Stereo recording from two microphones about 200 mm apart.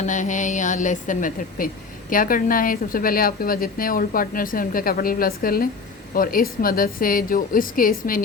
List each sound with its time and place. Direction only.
0.0 s speech: 40° left (ahead or behind)